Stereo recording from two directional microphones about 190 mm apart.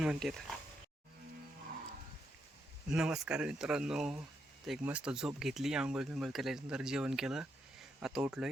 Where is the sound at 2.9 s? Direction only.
5° right (ahead or behind).